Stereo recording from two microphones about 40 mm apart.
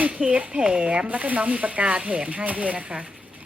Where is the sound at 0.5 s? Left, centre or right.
Right.